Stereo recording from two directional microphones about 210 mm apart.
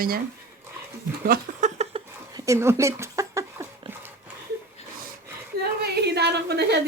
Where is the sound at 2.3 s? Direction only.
15° right (ahead or behind).